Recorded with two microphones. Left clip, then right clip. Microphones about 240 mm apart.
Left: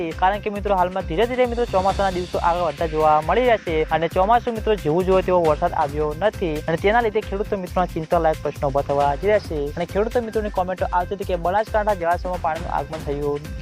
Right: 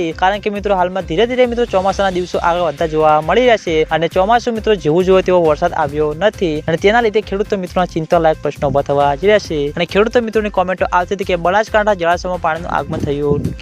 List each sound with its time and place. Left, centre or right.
0.0 s speech: right